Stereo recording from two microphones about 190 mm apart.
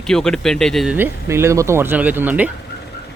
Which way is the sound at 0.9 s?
10° right (ahead or behind).